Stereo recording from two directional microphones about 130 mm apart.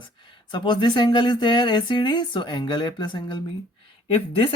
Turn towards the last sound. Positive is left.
turn(degrees=45)  # may be behind; listen again after turning